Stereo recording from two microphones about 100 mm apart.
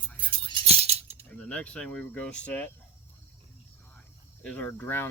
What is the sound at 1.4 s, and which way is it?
Speech, 15° left (ahead or behind).